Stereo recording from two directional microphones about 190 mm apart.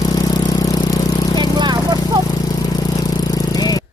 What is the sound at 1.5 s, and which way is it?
Vehicle, 20° right (ahead or behind).